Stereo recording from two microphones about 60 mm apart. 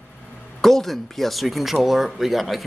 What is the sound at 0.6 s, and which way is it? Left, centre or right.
Speech, centre.